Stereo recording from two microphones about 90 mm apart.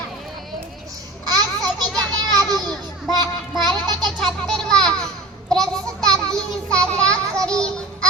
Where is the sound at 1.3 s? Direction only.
50° right (ahead or behind).